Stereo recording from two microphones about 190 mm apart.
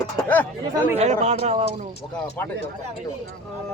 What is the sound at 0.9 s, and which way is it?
Speech, 35° right (ahead or behind).